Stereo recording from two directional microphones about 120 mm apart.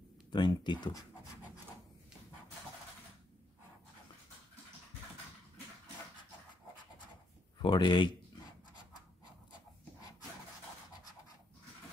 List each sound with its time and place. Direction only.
0.3 s speech: 40° left (ahead or behind)
7.5 s speech: 40° left (ahead or behind)